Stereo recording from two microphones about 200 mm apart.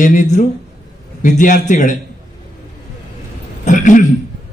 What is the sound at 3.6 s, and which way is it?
Speech, 40° left (ahead or behind).